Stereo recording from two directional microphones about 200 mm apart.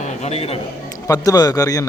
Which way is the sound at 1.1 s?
20° left (ahead or behind).